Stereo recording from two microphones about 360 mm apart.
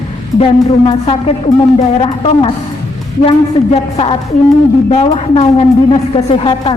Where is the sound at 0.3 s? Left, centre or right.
Centre.